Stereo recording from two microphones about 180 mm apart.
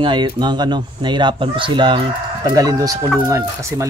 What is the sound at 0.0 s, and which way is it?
Speech, 25° right (ahead or behind).